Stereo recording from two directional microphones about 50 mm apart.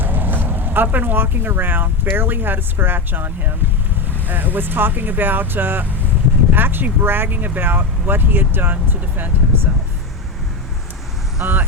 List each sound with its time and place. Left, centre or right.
0.0 s speech: right
11.4 s speech: right